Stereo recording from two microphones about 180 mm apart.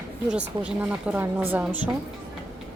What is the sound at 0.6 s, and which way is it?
Speech, 5° right (ahead or behind).